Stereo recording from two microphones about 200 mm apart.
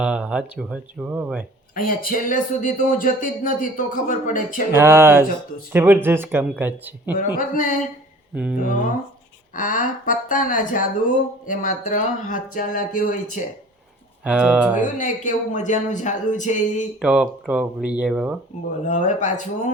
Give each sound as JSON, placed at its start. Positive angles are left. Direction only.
{"t": 0.0, "sound": "speech", "side_deg": -5}
{"t": 1.7, "sound": "speech", "side_deg": 45}
{"t": 4.7, "sound": "speech", "side_deg": -10}
{"t": 7.3, "sound": "speech", "side_deg": 45}
{"t": 9.6, "sound": "speech", "side_deg": 40}
{"t": 14.3, "sound": "speech", "side_deg": -5}
{"t": 14.9, "sound": "speech", "side_deg": 40}
{"t": 17.0, "sound": "speech", "side_deg": -5}
{"t": 18.9, "sound": "speech", "side_deg": 40}